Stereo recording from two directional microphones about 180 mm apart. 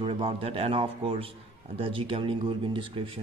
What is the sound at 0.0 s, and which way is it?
A man's voice, 35° right (ahead or behind).